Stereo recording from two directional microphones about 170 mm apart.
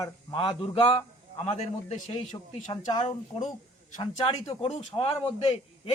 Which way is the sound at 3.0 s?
35° left (ahead or behind).